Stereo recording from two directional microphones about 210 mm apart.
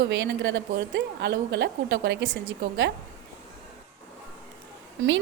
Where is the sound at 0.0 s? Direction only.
55° right (ahead or behind).